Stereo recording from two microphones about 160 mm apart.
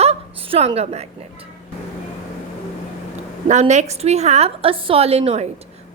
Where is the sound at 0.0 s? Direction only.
35° right (ahead or behind).